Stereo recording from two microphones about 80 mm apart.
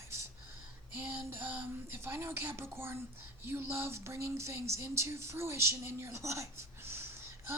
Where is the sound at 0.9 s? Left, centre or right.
Right.